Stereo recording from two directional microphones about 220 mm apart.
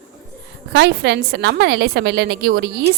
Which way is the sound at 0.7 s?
50° right (ahead or behind).